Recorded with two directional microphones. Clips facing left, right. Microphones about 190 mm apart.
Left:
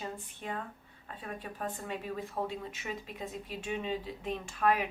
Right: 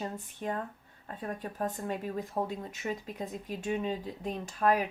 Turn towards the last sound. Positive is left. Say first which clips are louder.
# right 2 dB
turn(degrees=-40)  # may be behind; listen again after turning